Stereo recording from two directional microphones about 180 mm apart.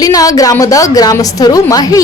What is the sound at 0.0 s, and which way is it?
A woman's voice, 20° left (ahead or behind).